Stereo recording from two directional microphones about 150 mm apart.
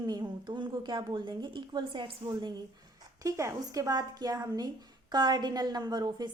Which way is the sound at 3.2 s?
20° right (ahead or behind).